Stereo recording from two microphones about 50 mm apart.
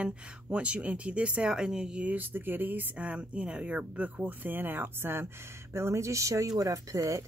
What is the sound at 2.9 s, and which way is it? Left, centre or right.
Speech, right.